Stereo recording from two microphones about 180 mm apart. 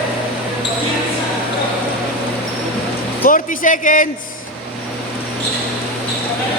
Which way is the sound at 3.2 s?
50° left (ahead or behind).